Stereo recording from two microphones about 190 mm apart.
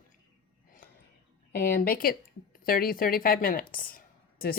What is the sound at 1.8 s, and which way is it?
A woman's voice, 50° left (ahead or behind).